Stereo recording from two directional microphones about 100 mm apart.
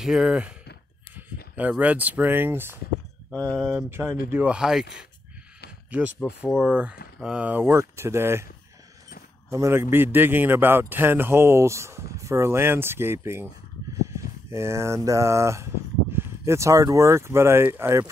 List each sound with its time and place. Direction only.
0.0 s speech: 5° right (ahead or behind); by 2.8 s 20° right (ahead or behind)
3.3 s speech: 15° left (ahead or behind)
3.7 s speech: 25° right (ahead or behind)
9.5 s a man's voice: 25° right (ahead or behind)
13.9 s a sound: 30° right (ahead or behind)